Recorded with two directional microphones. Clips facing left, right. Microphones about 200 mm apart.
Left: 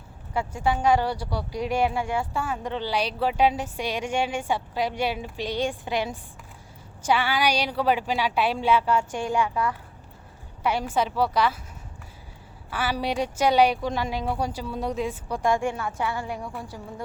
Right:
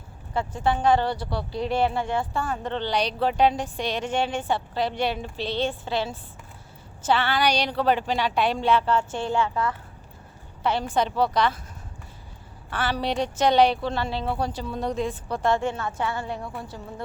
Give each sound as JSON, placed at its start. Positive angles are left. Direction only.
{"t": 0.3, "sound": "a woman's voice", "side_deg": 10}
{"t": 12.7, "sound": "a woman's voice", "side_deg": 10}